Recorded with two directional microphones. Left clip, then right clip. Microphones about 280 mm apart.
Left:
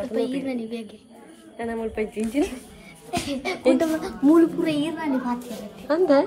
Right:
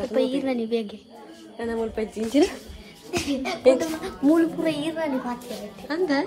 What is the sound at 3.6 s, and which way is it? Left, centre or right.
A child's voice, centre.